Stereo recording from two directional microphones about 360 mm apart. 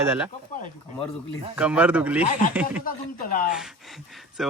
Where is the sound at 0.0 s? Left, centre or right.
Centre.